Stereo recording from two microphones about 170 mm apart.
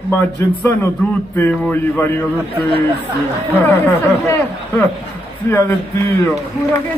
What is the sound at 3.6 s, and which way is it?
Speech, 10° left (ahead or behind).